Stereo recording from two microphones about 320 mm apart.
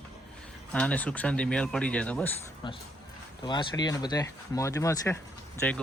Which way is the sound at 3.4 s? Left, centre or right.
Centre.